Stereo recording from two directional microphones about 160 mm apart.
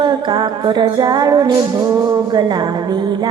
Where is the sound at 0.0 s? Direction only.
25° right (ahead or behind).